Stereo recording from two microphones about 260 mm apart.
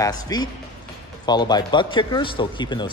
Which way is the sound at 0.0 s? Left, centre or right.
Centre.